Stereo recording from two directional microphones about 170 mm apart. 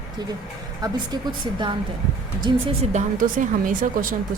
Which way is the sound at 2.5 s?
25° right (ahead or behind).